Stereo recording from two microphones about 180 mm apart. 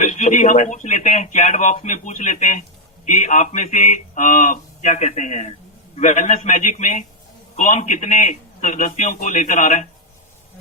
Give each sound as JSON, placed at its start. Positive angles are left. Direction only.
{"t": 0.0, "sound": "a man's voice", "side_deg": 40}